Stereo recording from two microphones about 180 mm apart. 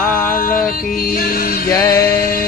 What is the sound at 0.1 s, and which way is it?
Music, 10° left (ahead or behind).